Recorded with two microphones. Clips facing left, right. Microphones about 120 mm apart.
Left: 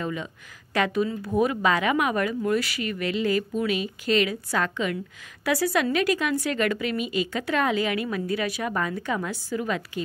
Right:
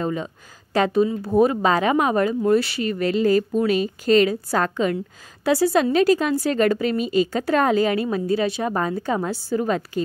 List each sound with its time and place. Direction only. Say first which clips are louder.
0.0 s a woman's voice: right 5 dB; 35° right (ahead or behind)